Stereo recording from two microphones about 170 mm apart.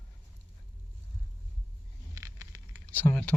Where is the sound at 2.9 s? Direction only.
10° left (ahead or behind).